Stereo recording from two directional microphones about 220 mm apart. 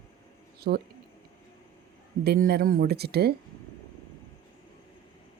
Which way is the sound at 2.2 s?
45° right (ahead or behind).